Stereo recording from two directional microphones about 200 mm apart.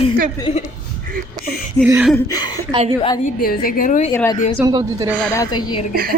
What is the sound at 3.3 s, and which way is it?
Speech, 45° left (ahead or behind).